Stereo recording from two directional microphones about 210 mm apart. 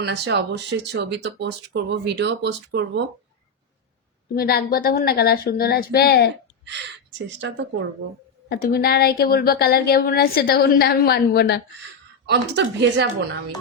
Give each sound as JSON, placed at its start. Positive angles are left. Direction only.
{"t": 0.0, "sound": "speech", "side_deg": -55}
{"t": 4.4, "sound": "a woman's voice", "side_deg": 45}
{"t": 6.7, "sound": "speech", "side_deg": -55}
{"t": 8.4, "sound": "a woman's voice", "side_deg": 50}
{"t": 12.2, "sound": "speech", "side_deg": -55}